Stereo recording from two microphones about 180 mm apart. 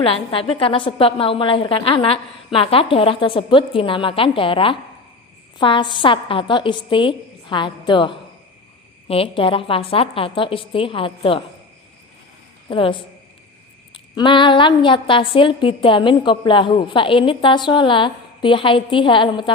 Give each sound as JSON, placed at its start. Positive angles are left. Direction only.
{"t": 0.0, "sound": "a woman's voice", "side_deg": 30}
{"t": 12.6, "sound": "a woman's voice", "side_deg": 30}